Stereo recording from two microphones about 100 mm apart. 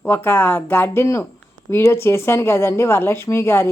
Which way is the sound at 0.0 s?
20° left (ahead or behind).